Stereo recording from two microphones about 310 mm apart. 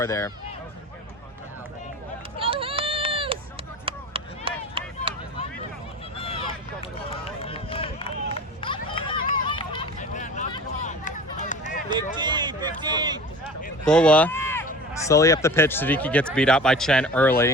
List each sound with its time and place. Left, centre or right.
0.0 s speech: centre
2.4 s run: centre
3.8 s chop: centre
6.1 s a sound: centre
7.1 s run: centre
9.5 s vehicle: centre
12.2 s a sound: centre
13.8 s speech: centre